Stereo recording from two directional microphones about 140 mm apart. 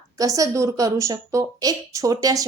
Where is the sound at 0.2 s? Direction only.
25° right (ahead or behind).